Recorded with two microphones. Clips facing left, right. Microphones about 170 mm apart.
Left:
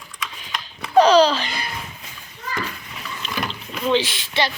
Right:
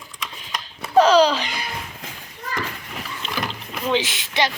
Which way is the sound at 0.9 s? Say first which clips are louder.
Left 1 dB; 5° right (ahead or behind).